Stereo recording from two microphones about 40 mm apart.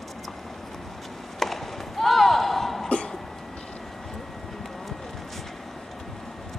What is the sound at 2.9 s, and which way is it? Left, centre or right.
Cough, left.